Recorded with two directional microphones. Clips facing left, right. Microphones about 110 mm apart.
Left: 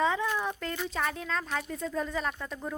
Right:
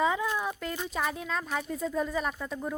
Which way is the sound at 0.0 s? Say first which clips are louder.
Even; 10° right (ahead or behind).